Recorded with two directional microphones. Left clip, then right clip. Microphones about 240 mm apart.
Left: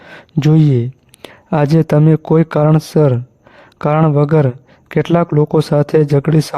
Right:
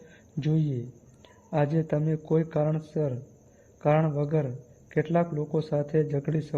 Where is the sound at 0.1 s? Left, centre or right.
Left.